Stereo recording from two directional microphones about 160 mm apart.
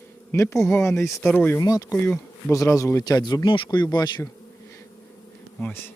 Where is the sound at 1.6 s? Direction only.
20° left (ahead or behind).